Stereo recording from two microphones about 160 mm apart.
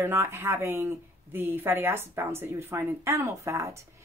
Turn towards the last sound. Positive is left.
turn(degrees=-20)  # may be behind; listen again after turning